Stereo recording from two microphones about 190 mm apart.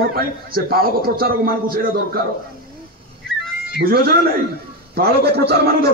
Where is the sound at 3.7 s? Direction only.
55° right (ahead or behind).